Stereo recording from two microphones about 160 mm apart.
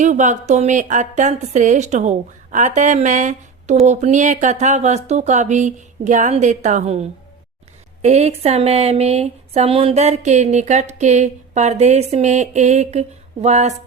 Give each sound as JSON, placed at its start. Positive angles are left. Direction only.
{"t": 0.0, "sound": "speech", "side_deg": -50}